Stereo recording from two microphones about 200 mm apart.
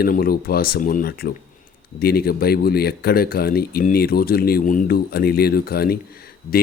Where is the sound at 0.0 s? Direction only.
50° left (ahead or behind).